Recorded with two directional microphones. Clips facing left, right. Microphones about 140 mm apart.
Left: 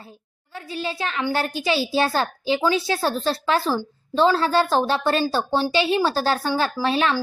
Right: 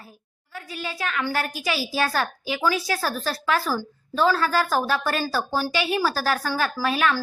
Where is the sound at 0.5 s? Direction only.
25° left (ahead or behind).